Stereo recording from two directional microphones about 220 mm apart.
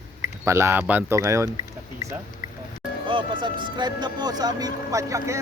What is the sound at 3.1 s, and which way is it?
Speech, 20° right (ahead or behind).